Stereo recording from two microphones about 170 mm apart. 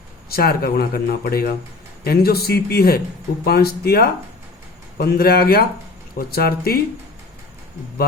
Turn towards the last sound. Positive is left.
turn(degrees=65)  # may be behind; listen again after turning